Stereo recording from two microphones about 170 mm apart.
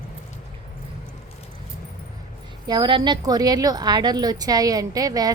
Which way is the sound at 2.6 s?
25° right (ahead or behind).